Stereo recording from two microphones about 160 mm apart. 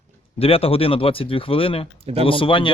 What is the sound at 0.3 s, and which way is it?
Speech, 35° left (ahead or behind).